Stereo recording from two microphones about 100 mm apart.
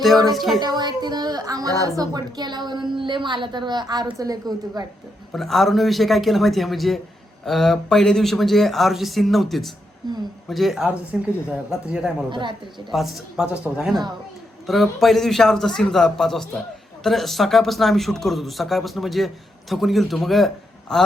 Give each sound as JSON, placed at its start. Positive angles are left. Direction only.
{"t": 0.0, "sound": "a man's voice", "side_deg": 0}
{"t": 0.6, "sound": "a woman's voice", "side_deg": -45}
{"t": 5.3, "sound": "a man's voice", "side_deg": 0}
{"t": 12.3, "sound": "a woman's voice", "side_deg": -50}
{"t": 12.9, "sound": "a man's voice", "side_deg": 0}